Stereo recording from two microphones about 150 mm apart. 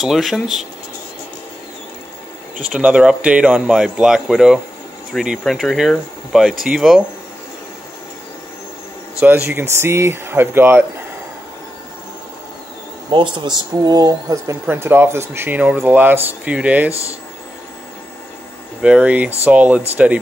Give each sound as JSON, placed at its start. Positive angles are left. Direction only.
{"t": 0.0, "sound": "speech", "side_deg": 0}
{"t": 2.7, "sound": "speech", "side_deg": -5}
{"t": 9.5, "sound": "speech", "side_deg": -15}
{"t": 13.1, "sound": "speech", "side_deg": -30}
{"t": 18.8, "sound": "speech", "side_deg": -10}